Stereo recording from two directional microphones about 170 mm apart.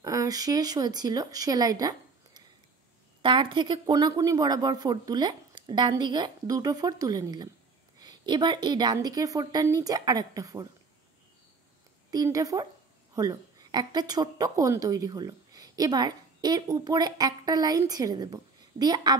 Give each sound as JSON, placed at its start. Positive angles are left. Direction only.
{"t": 0.0, "sound": "speech", "side_deg": -20}
{"t": 12.1, "sound": "a woman's voice", "side_deg": -20}